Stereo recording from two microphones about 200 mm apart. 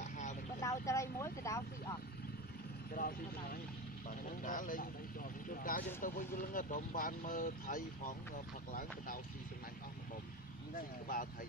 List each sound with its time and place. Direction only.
0.0 s vehicle: 35° left (ahead or behind)
0.6 s speech: 15° left (ahead or behind)
2.9 s speech: 45° left (ahead or behind)
10.8 s speech: 45° left (ahead or behind)